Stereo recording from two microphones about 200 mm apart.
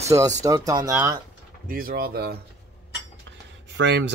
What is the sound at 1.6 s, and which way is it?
Speech, 45° right (ahead or behind).